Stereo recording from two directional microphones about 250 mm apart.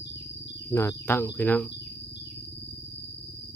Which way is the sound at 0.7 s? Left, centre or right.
Centre.